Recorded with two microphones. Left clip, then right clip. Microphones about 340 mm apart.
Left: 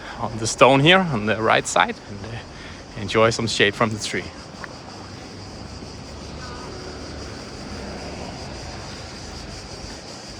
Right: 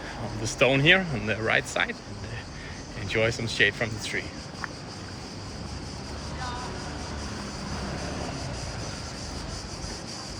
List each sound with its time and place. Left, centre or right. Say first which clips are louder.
0.4 s speech: left 7 dB; centre
3.1 s speech: left 8 dB; centre